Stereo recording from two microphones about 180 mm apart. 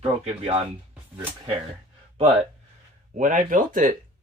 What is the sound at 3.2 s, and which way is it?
Speech, 45° right (ahead or behind).